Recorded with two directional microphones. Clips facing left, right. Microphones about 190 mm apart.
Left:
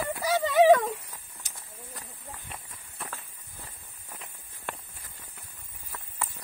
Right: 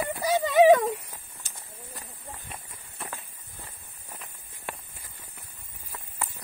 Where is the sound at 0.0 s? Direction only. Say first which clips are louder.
Right 1 dB; 20° right (ahead or behind).